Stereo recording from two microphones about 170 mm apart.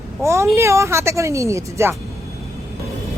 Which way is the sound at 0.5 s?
15° right (ahead or behind).